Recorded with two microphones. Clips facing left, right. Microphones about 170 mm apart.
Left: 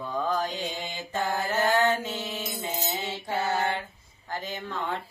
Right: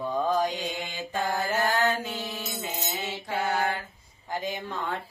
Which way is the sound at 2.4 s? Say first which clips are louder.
Left 2 dB; 30° left (ahead or behind).